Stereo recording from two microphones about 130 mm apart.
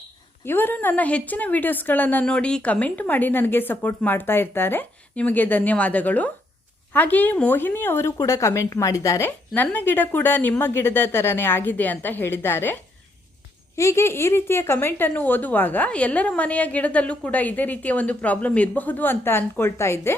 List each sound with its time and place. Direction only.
0.4 s speech: 15° left (ahead or behind)